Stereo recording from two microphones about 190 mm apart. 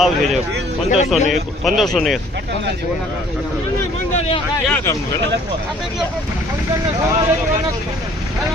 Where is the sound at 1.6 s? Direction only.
Centre (ahead or behind).